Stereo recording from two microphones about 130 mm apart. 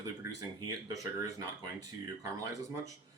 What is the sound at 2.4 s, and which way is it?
Speech, 25° right (ahead or behind).